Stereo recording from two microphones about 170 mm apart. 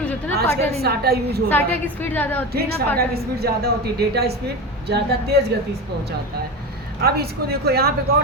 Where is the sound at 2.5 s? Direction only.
65° right (ahead or behind).